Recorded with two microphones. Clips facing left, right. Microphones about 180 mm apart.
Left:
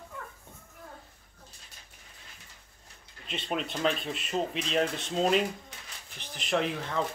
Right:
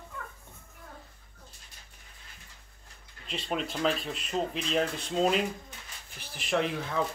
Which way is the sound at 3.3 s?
Centre (ahead or behind).